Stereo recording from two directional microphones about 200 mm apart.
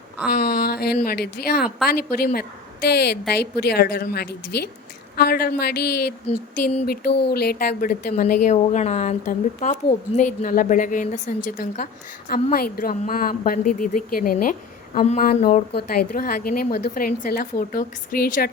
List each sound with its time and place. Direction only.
0.3 s a woman's voice: 50° left (ahead or behind)